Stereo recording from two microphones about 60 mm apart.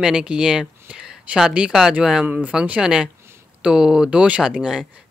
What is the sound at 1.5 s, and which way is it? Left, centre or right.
Speech, centre.